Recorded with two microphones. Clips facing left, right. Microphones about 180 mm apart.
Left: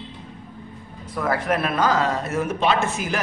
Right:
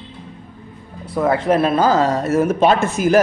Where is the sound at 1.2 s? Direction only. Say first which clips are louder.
Right 7 dB; 25° right (ahead or behind); by 3.2 s 45° right (ahead or behind).